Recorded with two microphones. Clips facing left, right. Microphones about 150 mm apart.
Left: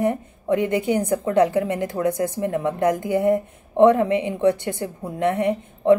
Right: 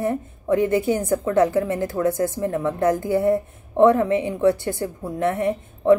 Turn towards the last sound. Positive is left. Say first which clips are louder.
# even
turn(degrees=20)  # may be behind; listen again after turning